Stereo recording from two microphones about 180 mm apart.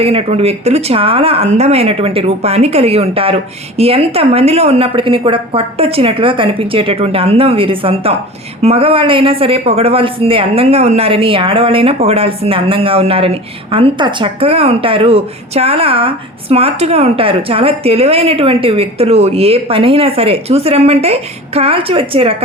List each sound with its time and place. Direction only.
0.0 s speech: 30° right (ahead or behind)